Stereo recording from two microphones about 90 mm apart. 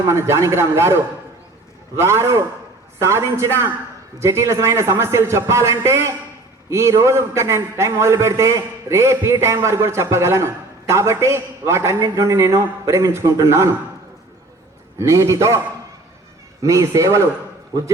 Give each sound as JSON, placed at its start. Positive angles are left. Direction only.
{"t": 0.1, "sound": "a man's voice", "side_deg": -30}
{"t": 14.9, "sound": "a man's voice", "side_deg": -30}
{"t": 16.6, "sound": "a man's voice", "side_deg": -35}
{"t": 17.7, "sound": "a man's voice", "side_deg": -45}